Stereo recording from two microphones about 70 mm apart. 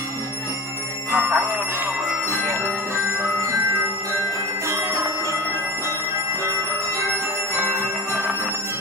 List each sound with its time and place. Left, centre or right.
1.1 s speech: right
2.0 s bell: right
7.5 s bell: right